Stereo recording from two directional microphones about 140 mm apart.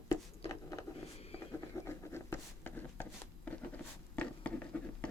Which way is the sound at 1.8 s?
15° left (ahead or behind).